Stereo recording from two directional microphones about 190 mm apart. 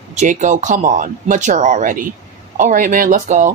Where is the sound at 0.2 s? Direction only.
40° right (ahead or behind).